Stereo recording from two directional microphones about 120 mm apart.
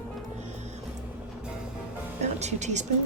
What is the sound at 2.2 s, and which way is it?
Speech, 70° right (ahead or behind).